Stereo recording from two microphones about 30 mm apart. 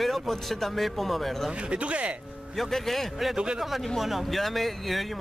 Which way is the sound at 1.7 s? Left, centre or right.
Right.